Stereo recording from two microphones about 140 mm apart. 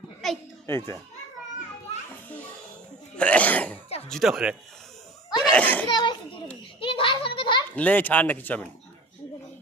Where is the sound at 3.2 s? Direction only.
10° left (ahead or behind).